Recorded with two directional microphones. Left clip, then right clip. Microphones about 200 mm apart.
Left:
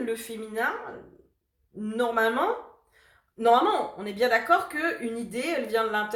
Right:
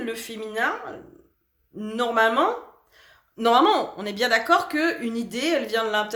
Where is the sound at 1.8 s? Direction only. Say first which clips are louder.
Right 4 dB; 45° right (ahead or behind).